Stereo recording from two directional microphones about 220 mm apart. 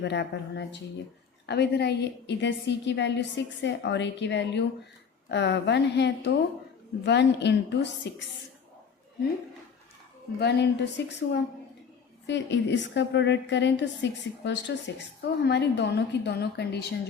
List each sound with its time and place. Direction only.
0.0 s a woman's voice: 50° left (ahead or behind)
10.4 s a woman's voice: 50° left (ahead or behind)